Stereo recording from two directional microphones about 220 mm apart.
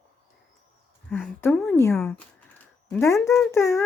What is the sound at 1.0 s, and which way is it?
Speech, 5° left (ahead or behind).